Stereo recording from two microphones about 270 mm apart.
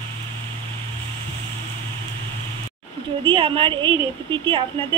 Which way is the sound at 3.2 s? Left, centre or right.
Centre.